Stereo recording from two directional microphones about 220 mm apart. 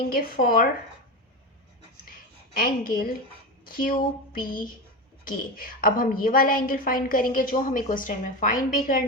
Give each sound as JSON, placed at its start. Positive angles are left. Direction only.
{"t": 0.1, "sound": "a woman's voice", "side_deg": 40}
{"t": 2.6, "sound": "a woman's voice", "side_deg": 40}